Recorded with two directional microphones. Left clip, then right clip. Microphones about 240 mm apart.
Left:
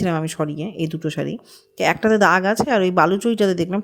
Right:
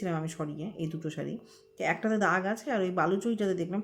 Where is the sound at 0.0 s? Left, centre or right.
Left.